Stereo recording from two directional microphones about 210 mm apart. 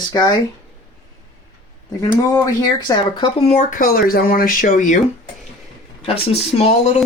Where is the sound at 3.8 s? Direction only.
45° left (ahead or behind).